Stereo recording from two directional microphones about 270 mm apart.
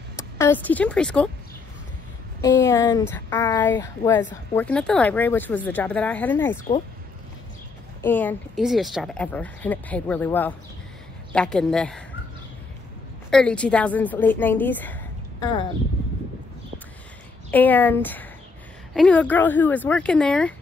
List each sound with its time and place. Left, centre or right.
0.4 s speech: centre
2.6 s speech: centre
8.0 s speech: centre
13.3 s speech: centre
17.5 s speech: centre